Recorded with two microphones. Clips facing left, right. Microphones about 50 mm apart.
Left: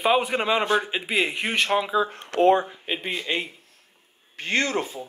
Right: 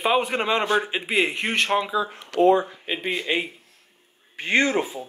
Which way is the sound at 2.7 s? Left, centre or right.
Centre.